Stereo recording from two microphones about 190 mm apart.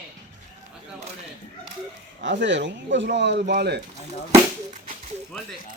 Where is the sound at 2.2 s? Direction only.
70° right (ahead or behind).